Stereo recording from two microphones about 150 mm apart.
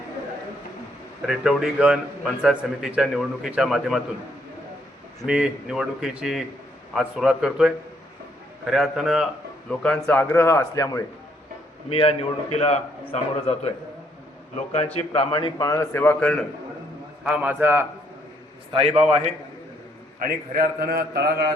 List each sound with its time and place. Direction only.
1.3 s a man's voice: centre (ahead or behind)
5.2 s a man's voice: 5° right (ahead or behind); by 11.0 s 20° left (ahead or behind)
11.9 s a man's voice: 40° left (ahead or behind)
14.9 s a man's voice: 40° left (ahead or behind); by 16.4 s 10° left (ahead or behind)
17.2 s a man's voice: 10° right (ahead or behind)
18.7 s a man's voice: 40° right (ahead or behind)
20.2 s a man's voice: 80° right